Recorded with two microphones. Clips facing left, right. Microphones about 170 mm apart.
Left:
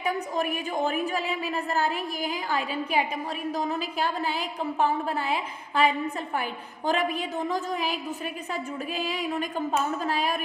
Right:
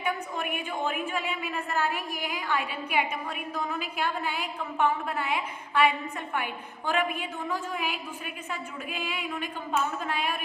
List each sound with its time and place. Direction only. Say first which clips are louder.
0.0 s a woman's voice: left 4 dB; 35° left (ahead or behind)